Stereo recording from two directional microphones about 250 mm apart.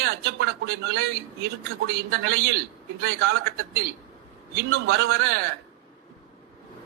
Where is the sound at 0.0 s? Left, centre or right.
Right.